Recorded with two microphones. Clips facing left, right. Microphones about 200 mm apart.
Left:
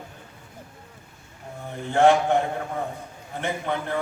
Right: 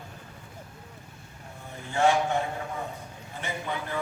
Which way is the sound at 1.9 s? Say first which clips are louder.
Left 6 dB; 55° left (ahead or behind).